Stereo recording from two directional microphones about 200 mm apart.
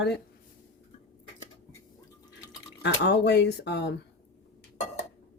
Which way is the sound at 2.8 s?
60° left (ahead or behind).